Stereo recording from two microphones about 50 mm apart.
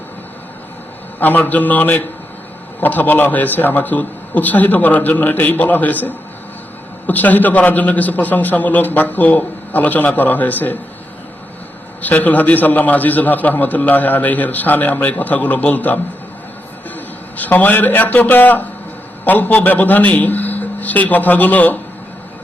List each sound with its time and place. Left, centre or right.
1.2 s a man's voice: left
12.0 s a man's voice: left
17.3 s a man's voice: left